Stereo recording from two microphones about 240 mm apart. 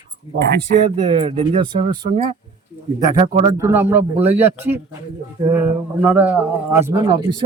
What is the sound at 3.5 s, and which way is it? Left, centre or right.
Speech, centre.